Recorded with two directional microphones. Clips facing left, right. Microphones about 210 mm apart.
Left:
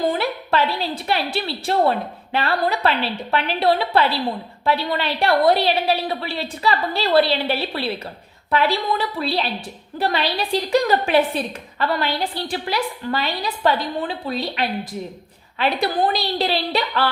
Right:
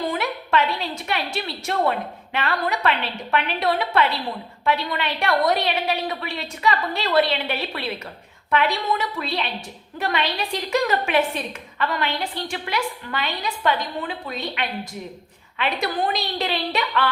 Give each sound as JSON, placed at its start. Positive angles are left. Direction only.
{"t": 0.1, "sound": "a woman's voice", "side_deg": 35}